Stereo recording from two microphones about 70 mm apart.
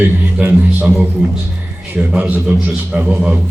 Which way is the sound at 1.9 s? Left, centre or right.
Right.